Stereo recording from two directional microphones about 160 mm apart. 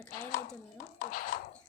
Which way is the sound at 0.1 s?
65° left (ahead or behind).